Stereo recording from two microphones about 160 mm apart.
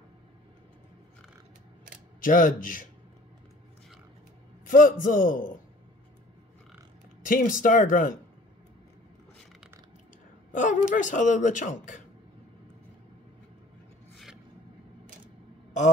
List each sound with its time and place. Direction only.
2.2 s a man's voice: 55° left (ahead or behind)
4.6 s a man's voice: 55° left (ahead or behind)
7.2 s a man's voice: 55° left (ahead or behind)
10.5 s speech: 50° left (ahead or behind)